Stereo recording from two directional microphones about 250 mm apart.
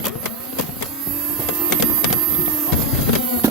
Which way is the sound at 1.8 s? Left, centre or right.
Centre.